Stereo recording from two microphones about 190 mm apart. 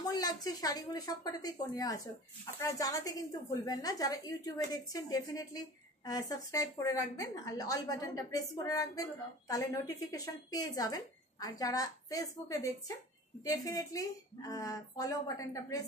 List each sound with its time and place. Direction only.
0.0 s a woman's voice: 20° left (ahead or behind)